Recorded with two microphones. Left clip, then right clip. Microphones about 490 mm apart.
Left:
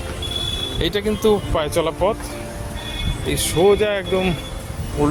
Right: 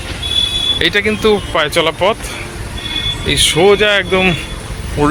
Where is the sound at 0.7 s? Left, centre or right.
Left.